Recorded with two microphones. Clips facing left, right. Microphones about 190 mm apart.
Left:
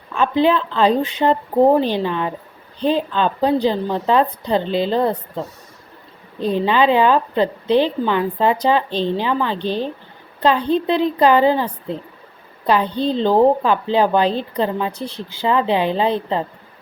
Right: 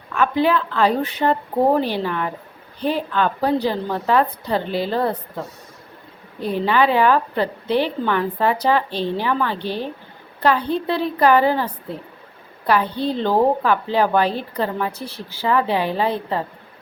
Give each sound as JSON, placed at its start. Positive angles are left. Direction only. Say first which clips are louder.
{"t": 0.1, "sound": "a woman's voice", "louder": "left 2 dB", "side_deg": 20}
{"t": 6.4, "sound": "a woman's voice", "louder": "left 2 dB", "side_deg": 20}